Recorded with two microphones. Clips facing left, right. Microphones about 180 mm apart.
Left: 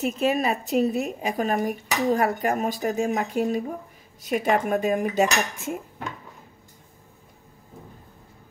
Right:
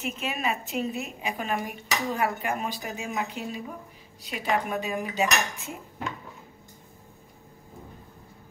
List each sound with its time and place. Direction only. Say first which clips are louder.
0.0 s a woman's voice: left 8 dB; 40° left (ahead or behind)
4.2 s cutlery: left 6 dB; 45° left (ahead or behind)